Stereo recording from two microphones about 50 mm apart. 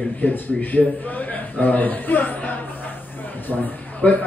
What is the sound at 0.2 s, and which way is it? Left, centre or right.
A man's voice, left.